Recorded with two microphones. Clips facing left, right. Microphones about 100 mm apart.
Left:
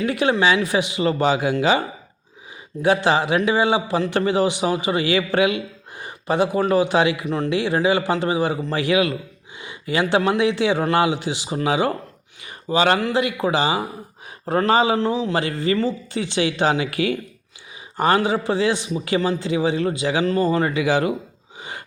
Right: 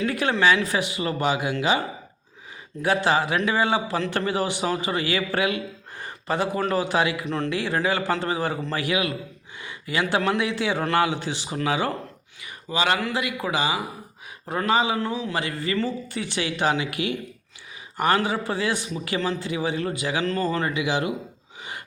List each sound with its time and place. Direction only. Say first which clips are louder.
0.0 s a man's voice: left 3 dB; 20° left (ahead or behind)
2.8 s a man's voice: left 4 dB; 25° left (ahead or behind)
7.3 s speech: left 3 dB; 5° left (ahead or behind)
7.5 s speech: left 7 dB; 20° left (ahead or behind)
8.7 s a man's voice: left 6 dB; 30° left (ahead or behind)
12.5 s a man's voice: left 6 dB; 35° left (ahead or behind)
17.9 s a man's voice: left 4 dB; 25° left (ahead or behind)
20.2 s speech: left 6 dB; 15° left (ahead or behind)
20.7 s speech: left 5 dB; 40° left (ahead or behind)